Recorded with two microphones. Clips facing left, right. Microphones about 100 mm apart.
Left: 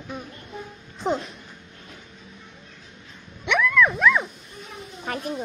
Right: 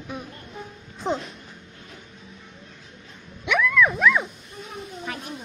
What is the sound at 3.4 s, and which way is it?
Dog, centre (ahead or behind).